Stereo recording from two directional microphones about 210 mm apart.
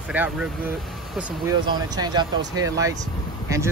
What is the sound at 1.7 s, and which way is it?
Speech, 20° right (ahead or behind).